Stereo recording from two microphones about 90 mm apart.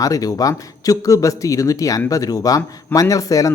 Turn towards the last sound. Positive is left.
turn(degrees=40)  # may be behind; listen again after turning